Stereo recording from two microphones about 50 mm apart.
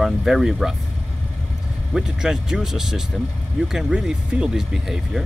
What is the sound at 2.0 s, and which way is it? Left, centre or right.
Speech, centre.